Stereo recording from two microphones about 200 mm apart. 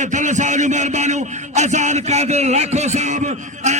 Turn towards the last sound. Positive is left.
turn(degrees=-35)  # may be behind; listen again after turning